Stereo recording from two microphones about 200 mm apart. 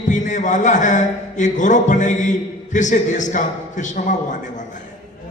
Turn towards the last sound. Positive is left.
turn(degrees=40)  # may be behind; listen again after turning